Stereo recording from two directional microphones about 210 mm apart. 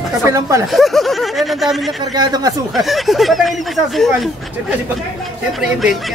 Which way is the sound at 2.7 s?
Centre (ahead or behind).